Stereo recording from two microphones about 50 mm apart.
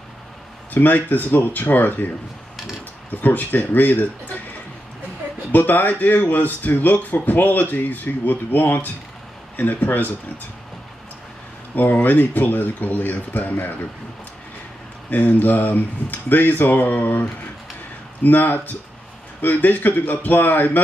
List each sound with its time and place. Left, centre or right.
0.7 s speech: left
3.2 s speech: left
5.5 s speech: left
11.7 s speech: left
15.0 s speech: left
18.2 s speech: left